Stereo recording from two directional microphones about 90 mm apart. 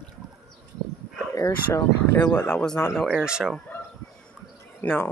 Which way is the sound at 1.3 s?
35° left (ahead or behind).